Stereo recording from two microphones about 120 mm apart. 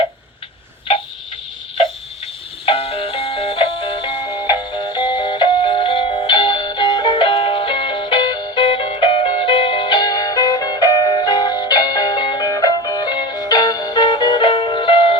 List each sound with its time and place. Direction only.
2.2 s music: 55° left (ahead or behind)